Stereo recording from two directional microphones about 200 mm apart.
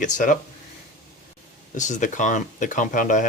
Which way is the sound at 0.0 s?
40° left (ahead or behind).